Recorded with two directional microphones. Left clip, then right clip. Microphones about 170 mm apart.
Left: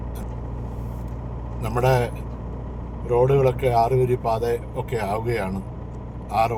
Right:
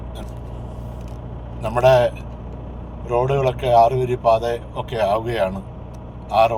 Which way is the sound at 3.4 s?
15° left (ahead or behind).